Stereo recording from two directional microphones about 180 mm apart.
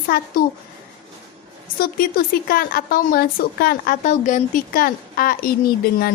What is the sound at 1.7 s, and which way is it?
A woman's voice, 55° left (ahead or behind).